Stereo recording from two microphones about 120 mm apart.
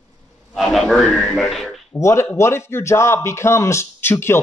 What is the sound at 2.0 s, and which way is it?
Speech, 25° left (ahead or behind).